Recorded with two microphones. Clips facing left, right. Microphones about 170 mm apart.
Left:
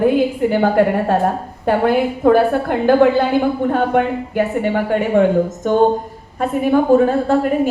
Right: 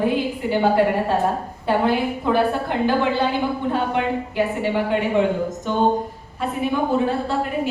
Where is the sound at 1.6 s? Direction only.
50° left (ahead or behind).